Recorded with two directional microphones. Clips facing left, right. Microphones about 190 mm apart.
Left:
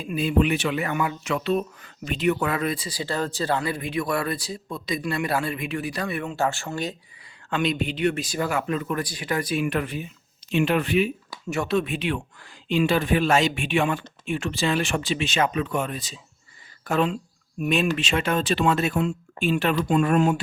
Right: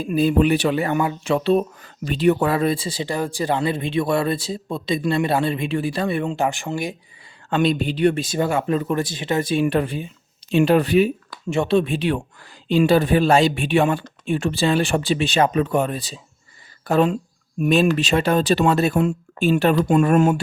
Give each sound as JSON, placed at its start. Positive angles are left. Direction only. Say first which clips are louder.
{"t": 0.0, "sound": "speech", "louder": "right 5 dB", "side_deg": -40}
{"t": 3.1, "sound": "speech", "louder": "right 2 dB", "side_deg": -10}
{"t": 3.6, "sound": "speech", "louder": "right 6 dB", "side_deg": -25}
{"t": 6.3, "sound": "speech", "louder": "right 3 dB", "side_deg": -15}
{"t": 7.5, "sound": "speech", "louder": "right 5 dB", "side_deg": -35}
{"t": 11.4, "sound": "speech", "louder": "right 5 dB", "side_deg": -25}